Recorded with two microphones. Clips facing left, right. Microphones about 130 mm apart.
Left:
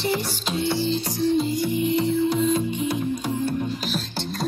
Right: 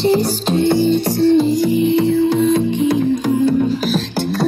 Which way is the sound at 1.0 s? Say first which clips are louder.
Right 9 dB; 75° right (ahead or behind).